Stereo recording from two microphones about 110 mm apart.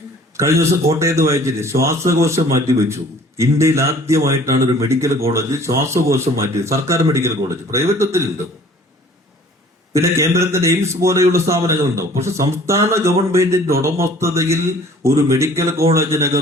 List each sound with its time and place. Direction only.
0.3 s a man's voice: 25° right (ahead or behind)
9.9 s a man's voice: 25° right (ahead or behind)